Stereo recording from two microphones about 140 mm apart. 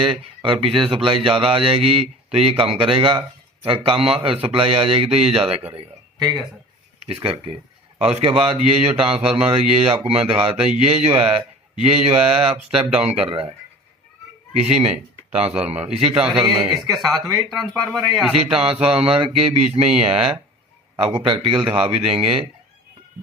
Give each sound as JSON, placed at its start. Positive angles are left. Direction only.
{"t": 0.0, "sound": "speech", "side_deg": -35}
{"t": 7.0, "sound": "speech", "side_deg": -40}
{"t": 14.5, "sound": "speech", "side_deg": -45}
{"t": 16.4, "sound": "speech", "side_deg": -30}
{"t": 17.9, "sound": "a man's voice", "side_deg": 0}
{"t": 18.5, "sound": "speech", "side_deg": -45}